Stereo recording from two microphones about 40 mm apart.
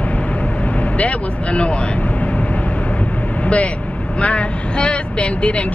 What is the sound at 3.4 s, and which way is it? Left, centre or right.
Vehicle, left.